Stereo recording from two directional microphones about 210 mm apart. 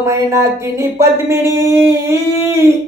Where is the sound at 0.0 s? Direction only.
15° right (ahead or behind).